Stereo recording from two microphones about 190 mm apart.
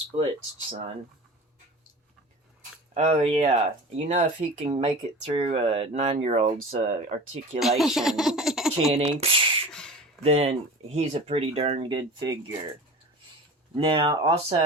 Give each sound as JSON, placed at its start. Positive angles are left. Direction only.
{"t": 0.1, "sound": "speech", "side_deg": -25}
{"t": 2.9, "sound": "speech", "side_deg": -30}
{"t": 4.7, "sound": "speech", "side_deg": -25}
{"t": 7.8, "sound": "speech", "side_deg": 0}
{"t": 8.9, "sound": "speech", "side_deg": -30}
{"t": 13.7, "sound": "speech", "side_deg": -25}